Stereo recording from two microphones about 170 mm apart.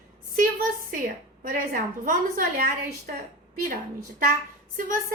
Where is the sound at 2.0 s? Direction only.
55° right (ahead or behind).